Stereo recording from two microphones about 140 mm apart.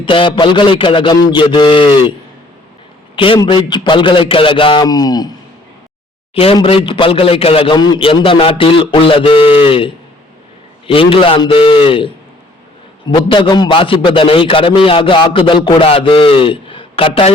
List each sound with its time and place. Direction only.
0.0 s a man's voice: 35° left (ahead or behind)
3.4 s a man's voice: 35° left (ahead or behind)
6.3 s a man's voice: 40° left (ahead or behind)
13.1 s a man's voice: 35° left (ahead or behind)